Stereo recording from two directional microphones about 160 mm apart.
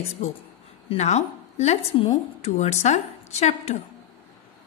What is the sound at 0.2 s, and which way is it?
A woman's voice, 45° left (ahead or behind).